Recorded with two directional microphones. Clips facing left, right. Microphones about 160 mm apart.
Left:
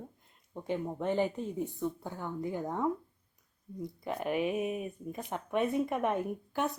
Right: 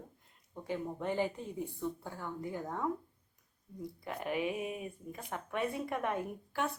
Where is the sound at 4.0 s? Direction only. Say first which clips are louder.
Left 4 dB; 20° left (ahead or behind).